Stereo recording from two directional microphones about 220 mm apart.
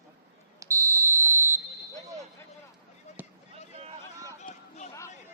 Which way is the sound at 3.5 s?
25° right (ahead or behind).